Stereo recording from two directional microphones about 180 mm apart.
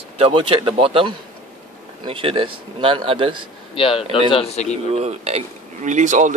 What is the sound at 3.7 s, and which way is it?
Speech, 30° left (ahead or behind).